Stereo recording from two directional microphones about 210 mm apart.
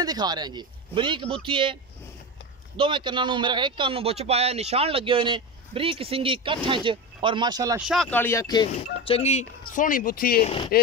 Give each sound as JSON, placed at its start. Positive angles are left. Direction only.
{"t": 0.0, "sound": "a man's voice", "side_deg": -20}
{"t": 2.8, "sound": "a man's voice", "side_deg": -20}
{"t": 7.9, "sound": "speech", "side_deg": 5}
{"t": 9.0, "sound": "speech", "side_deg": 30}
{"t": 10.4, "sound": "speech", "side_deg": 25}